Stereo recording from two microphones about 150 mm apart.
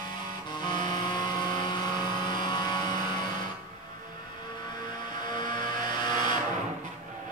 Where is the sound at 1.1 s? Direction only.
30° left (ahead or behind).